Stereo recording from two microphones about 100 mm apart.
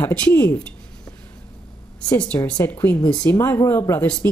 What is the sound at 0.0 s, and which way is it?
Speech, 20° left (ahead or behind).